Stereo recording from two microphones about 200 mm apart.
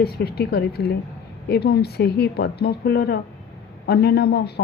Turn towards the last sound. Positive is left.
turn(degrees=55)  # may be behind; listen again after turning